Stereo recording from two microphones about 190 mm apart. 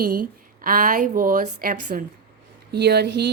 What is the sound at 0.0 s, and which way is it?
A woman's voice, 45° right (ahead or behind).